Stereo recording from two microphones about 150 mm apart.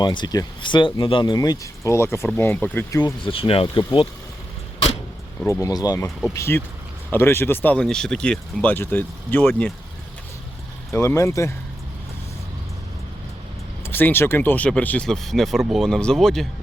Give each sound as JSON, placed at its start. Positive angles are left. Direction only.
{"t": 0.0, "sound": "speech", "side_deg": 30}
{"t": 3.2, "sound": "speech", "side_deg": 35}
{"t": 5.5, "sound": "speech", "side_deg": 20}
{"t": 10.9, "sound": "speech", "side_deg": 20}
{"t": 13.8, "sound": "speech", "side_deg": 15}